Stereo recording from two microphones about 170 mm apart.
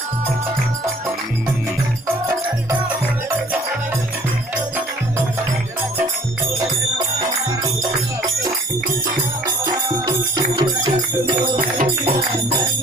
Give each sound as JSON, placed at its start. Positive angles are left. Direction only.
{"t": 10.1, "sound": "music", "side_deg": -25}
{"t": 11.5, "sound": "music", "side_deg": -55}